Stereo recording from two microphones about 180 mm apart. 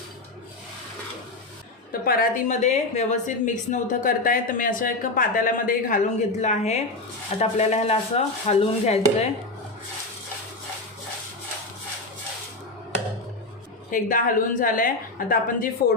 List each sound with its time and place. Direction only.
1.9 s a woman's voice: 55° left (ahead or behind); by 9.0 s 35° left (ahead or behind)
13.9 s a woman's voice: 50° left (ahead or behind)